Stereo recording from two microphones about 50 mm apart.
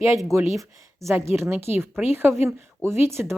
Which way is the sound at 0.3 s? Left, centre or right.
Right.